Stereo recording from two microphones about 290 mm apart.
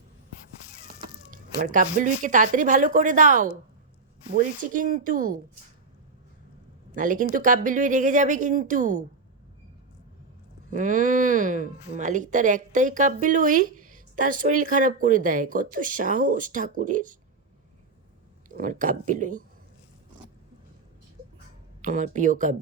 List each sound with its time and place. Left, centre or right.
1.0 s speech: right
6.9 s speech: right
10.7 s speech: right
18.4 s speech: right
21.8 s speech: right